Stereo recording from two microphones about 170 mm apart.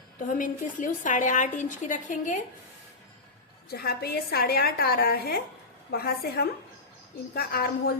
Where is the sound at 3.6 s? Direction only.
65° left (ahead or behind).